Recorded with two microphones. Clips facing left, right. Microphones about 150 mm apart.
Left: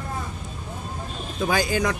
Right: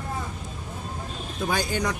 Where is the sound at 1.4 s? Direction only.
90° left.